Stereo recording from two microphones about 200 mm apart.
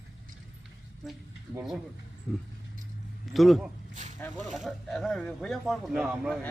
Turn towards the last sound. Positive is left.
turn(degrees=-5)  # may be behind; listen again after turning